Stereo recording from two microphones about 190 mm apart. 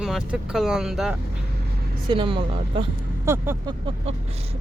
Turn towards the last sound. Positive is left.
turn(degrees=-15)  # may be behind; listen again after turning